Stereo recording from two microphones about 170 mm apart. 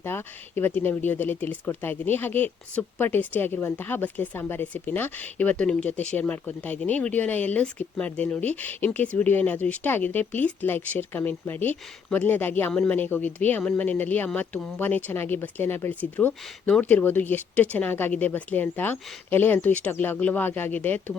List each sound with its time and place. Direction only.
0.0 s speech: 15° left (ahead or behind)